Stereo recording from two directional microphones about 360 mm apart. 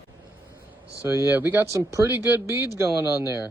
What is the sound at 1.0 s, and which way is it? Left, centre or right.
Speech, centre.